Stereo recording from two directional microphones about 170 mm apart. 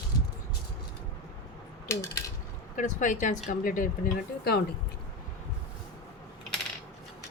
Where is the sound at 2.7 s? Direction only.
50° left (ahead or behind).